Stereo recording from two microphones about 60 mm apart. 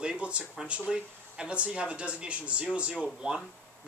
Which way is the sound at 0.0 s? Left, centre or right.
Centre.